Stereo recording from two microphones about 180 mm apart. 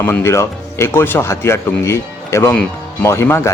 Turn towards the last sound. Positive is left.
turn(degrees=15)  # may be behind; listen again after turning